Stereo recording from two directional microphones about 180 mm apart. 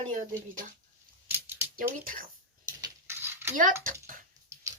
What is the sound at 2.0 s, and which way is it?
Speech, 50° right (ahead or behind).